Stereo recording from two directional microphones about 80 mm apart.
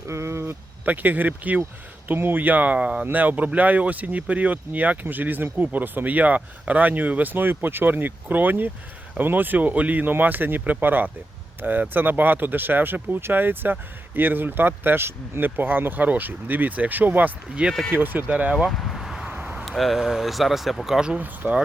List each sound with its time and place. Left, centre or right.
0.1 s a sound: right
0.9 s speech: right
17.9 s speech: right
18.5 s a sound: centre
19.3 s vehicle: centre
19.6 s speech: centre
21.2 s speech: right